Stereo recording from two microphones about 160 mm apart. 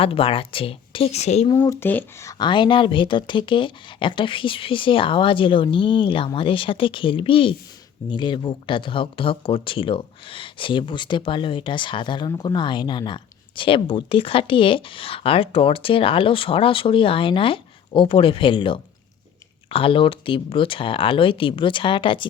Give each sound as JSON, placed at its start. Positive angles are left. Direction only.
{"t": 0.0, "sound": "speech", "side_deg": 35}
{"t": 1.6, "sound": "speech", "side_deg": 15}
{"t": 2.4, "sound": "speech", "side_deg": 30}